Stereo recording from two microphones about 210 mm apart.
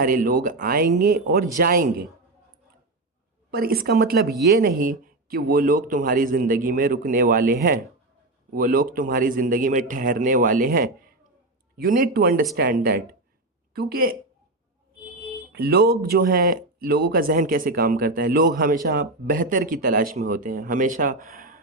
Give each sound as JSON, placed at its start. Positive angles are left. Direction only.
{"t": 0.0, "sound": "speech", "side_deg": -40}
{"t": 3.5, "sound": "a man's voice", "side_deg": -45}
{"t": 15.5, "sound": "speech", "side_deg": -50}